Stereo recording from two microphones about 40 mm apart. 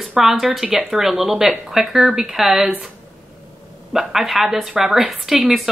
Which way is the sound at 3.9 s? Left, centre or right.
Centre.